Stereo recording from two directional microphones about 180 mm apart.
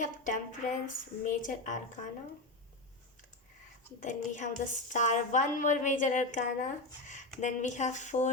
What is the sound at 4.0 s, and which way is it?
A woman's voice, 45° left (ahead or behind).